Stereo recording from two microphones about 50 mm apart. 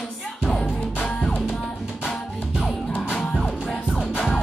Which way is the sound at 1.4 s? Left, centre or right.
Centre.